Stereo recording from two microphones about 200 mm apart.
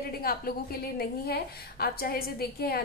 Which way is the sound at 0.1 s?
50° left (ahead or behind).